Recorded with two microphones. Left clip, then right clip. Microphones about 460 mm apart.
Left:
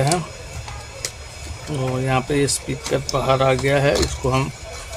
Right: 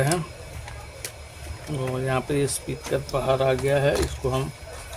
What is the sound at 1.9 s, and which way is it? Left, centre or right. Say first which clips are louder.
Speech: left 5 dB; right.